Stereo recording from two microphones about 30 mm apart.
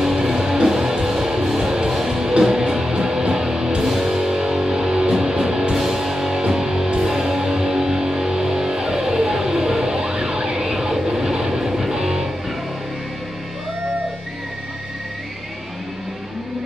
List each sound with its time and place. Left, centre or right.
0.0 s music: centre
1.6 s music: right
5.9 s music: centre
9.9 s vehicle: right